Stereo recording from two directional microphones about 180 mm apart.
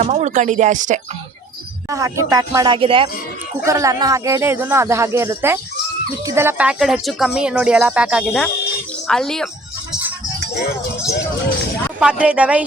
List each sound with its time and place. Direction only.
0.0 s speech: 40° right (ahead or behind)
1.9 s speech: 20° right (ahead or behind)
2.7 s speech: 30° right (ahead or behind)
3.6 s speech: 15° right (ahead or behind); by 9.5 s centre (ahead or behind)
11.9 s speech: 5° right (ahead or behind)